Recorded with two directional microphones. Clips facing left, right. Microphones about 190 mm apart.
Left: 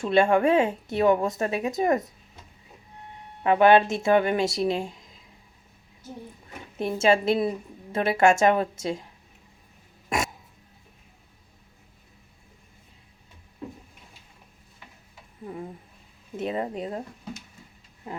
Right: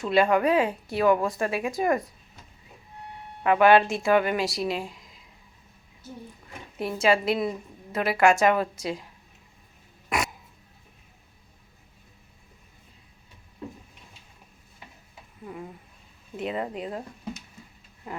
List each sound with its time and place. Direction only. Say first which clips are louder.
0.0 s a woman's voice: left 1 dB; 25° left (ahead or behind)
3.4 s a woman's voice: left 1 dB; 25° left (ahead or behind)
6.7 s a woman's voice: left 2 dB; 25° left (ahead or behind)
15.4 s a sound: left 2 dB; 35° left (ahead or behind)
16.5 s speech: left 1 dB; 35° left (ahead or behind)